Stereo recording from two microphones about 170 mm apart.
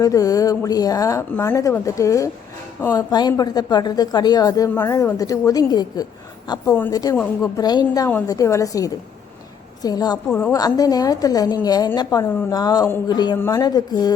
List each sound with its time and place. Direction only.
0.0 s a woman's voice: 20° left (ahead or behind)
10.2 s a woman's voice: 5° left (ahead or behind)
10.5 s speech: 20° left (ahead or behind)